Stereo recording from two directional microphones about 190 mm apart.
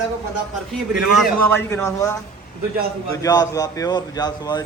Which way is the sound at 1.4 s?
10° left (ahead or behind).